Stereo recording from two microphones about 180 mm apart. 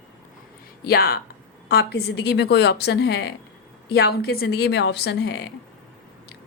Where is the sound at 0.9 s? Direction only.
55° left (ahead or behind).